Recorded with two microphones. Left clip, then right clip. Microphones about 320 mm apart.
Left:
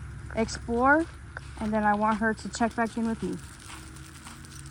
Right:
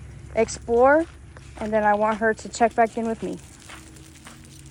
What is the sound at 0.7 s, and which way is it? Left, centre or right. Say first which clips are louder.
Speech: right 6 dB; centre.